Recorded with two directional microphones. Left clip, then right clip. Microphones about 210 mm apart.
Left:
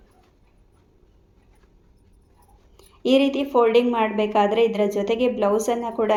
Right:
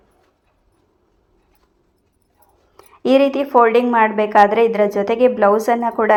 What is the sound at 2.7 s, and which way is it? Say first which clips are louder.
A woman's voice: right 5 dB; 20° right (ahead or behind).